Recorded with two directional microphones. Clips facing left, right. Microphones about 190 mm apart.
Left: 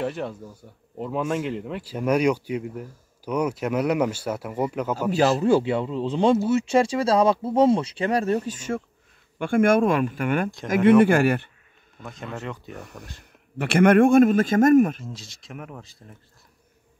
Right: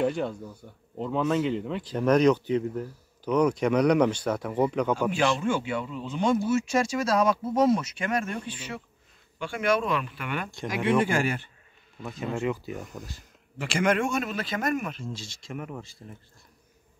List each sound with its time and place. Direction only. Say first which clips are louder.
0.0 s speech: right 2 dB; 5° left (ahead or behind)
5.4 s a man's voice: left 8 dB; 35° left (ahead or behind)
11.1 s speech: left 7 dB; 60° left (ahead or behind)
12.0 s speech: right 4 dB; centre (ahead or behind)
13.2 s a man's voice: left 12 dB; 60° left (ahead or behind)
15.1 s speech: right 2 dB; centre (ahead or behind)